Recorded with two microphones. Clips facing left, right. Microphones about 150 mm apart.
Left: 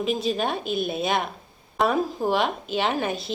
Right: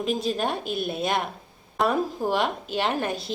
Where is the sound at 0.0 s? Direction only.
5° left (ahead or behind).